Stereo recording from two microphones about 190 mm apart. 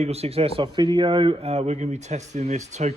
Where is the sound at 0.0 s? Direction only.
35° right (ahead or behind).